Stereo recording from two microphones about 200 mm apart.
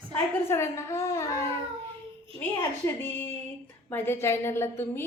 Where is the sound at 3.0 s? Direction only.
10° left (ahead or behind).